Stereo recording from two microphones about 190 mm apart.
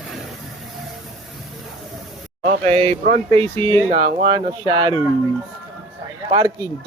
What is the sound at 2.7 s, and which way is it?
Speech, 35° right (ahead or behind).